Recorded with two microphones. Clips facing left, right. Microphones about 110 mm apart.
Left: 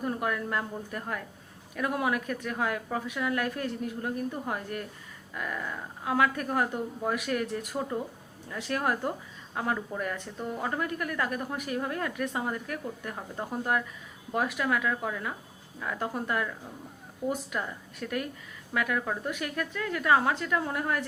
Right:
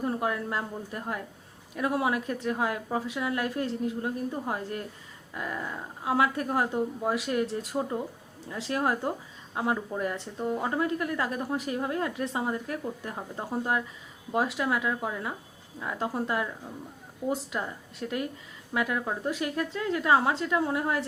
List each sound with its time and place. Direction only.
0.0 s a woman's voice: 25° right (ahead or behind)